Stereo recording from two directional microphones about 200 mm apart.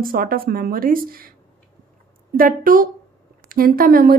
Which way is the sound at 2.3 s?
45° right (ahead or behind).